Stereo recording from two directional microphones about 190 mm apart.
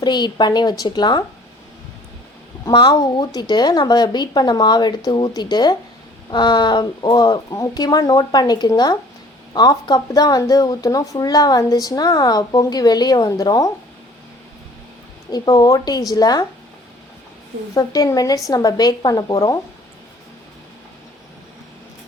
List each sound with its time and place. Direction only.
0.0 s speech: 25° left (ahead or behind)
2.6 s speech: 20° left (ahead or behind)
15.3 s speech: 20° left (ahead or behind)
17.7 s speech: 20° left (ahead or behind)